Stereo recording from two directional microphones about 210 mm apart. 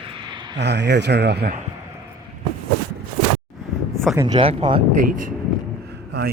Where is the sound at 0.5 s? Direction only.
55° right (ahead or behind).